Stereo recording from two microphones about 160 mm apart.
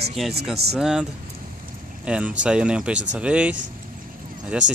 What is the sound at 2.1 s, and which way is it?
Speech, 5° right (ahead or behind).